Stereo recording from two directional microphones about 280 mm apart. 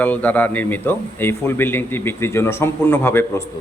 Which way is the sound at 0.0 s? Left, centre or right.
Centre.